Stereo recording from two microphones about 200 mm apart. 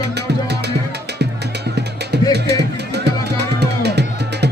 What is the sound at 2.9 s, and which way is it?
Music, 55° right (ahead or behind).